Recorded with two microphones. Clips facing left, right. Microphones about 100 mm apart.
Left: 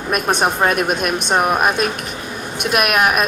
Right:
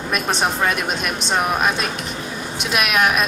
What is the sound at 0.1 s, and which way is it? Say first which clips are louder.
Speech: left 4 dB; 50° left (ahead or behind).